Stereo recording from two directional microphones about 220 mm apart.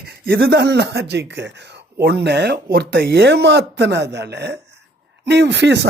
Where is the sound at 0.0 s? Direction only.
45° right (ahead or behind).